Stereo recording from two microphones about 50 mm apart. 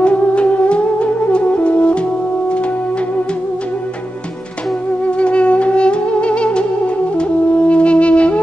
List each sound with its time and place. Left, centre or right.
0.0 s music: left
5.0 s music: left